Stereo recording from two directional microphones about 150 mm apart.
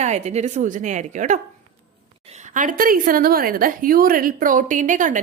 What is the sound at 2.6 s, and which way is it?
A woman's voice, 65° right (ahead or behind).